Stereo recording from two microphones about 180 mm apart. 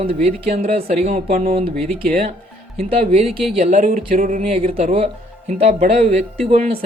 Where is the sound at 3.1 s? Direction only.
35° right (ahead or behind).